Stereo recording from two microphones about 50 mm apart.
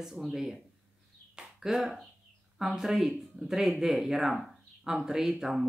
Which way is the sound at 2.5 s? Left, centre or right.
Centre.